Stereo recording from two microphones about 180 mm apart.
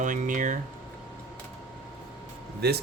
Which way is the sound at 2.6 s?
65° right (ahead or behind).